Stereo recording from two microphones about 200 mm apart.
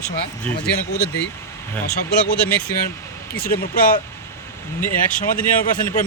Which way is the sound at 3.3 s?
50° left (ahead or behind).